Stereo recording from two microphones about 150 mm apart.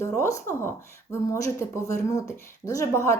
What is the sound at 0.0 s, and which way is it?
Speech, 20° left (ahead or behind).